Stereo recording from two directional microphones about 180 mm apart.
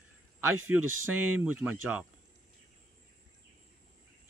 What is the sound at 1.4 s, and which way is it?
Speech, 10° right (ahead or behind).